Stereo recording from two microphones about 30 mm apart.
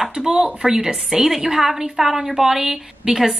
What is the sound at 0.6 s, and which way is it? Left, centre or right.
A woman's voice, centre.